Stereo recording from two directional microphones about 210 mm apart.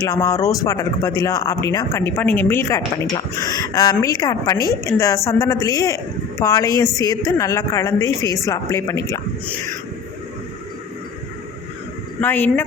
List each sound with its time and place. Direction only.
0.0 s speech: 15° left (ahead or behind)
12.2 s speech: 10° left (ahead or behind)